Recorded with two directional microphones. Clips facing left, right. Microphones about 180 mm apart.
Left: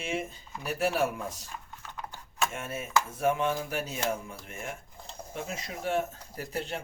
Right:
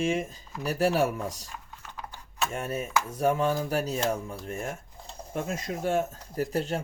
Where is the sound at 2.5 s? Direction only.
40° right (ahead or behind).